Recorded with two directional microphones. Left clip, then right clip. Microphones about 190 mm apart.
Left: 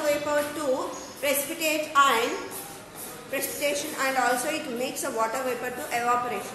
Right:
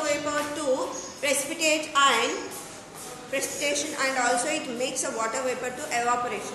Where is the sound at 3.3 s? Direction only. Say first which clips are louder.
Even; 10° left (ahead or behind).